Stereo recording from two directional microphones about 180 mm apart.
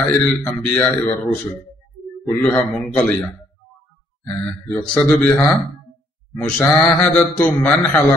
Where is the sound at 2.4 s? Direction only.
5° left (ahead or behind).